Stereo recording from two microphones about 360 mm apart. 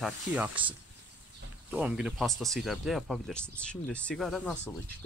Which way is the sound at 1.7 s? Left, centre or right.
Centre.